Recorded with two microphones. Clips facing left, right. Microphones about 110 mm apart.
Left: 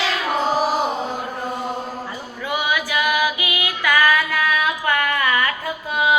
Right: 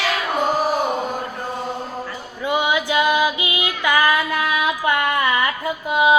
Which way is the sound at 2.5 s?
20° right (ahead or behind).